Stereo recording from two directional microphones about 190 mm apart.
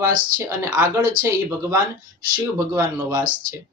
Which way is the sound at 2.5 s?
15° right (ahead or behind).